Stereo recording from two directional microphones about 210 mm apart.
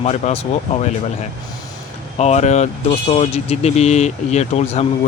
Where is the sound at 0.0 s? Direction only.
30° left (ahead or behind).